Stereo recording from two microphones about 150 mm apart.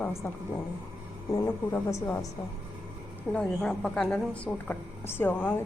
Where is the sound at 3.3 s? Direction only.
5° left (ahead or behind).